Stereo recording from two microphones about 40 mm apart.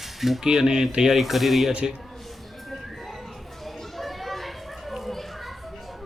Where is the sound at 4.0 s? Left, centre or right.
Centre.